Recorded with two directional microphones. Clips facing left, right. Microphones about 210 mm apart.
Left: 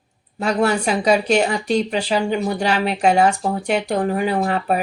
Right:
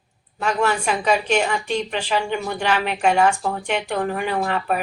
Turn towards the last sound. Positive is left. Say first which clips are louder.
# left 3 dB
turn(degrees=40)  # may be behind; listen again after turning